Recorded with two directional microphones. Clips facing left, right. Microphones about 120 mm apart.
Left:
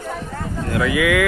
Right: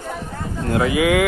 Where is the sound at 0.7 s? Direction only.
30° right (ahead or behind).